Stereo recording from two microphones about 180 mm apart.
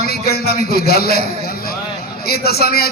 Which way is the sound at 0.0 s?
60° left (ahead or behind).